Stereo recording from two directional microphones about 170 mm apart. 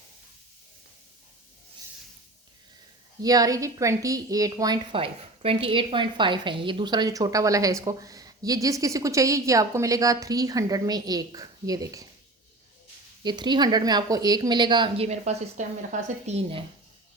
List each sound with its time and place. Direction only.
3.2 s a woman's voice: 20° right (ahead or behind)
13.2 s a woman's voice: 25° right (ahead or behind); by 16.3 s 45° right (ahead or behind)